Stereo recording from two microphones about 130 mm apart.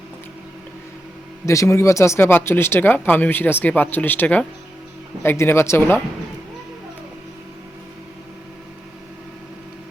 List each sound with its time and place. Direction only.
1.5 s speech: 20° left (ahead or behind)